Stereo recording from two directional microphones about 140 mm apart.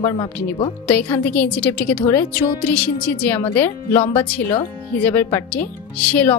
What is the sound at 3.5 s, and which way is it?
Speech, 15° left (ahead or behind).